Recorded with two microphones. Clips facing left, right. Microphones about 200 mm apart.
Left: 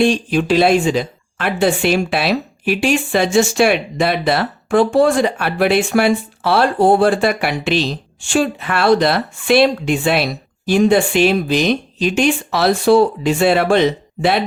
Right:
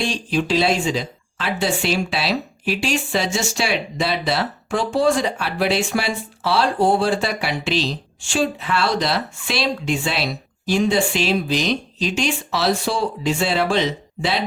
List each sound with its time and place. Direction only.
0.0 s speech: 55° left (ahead or behind)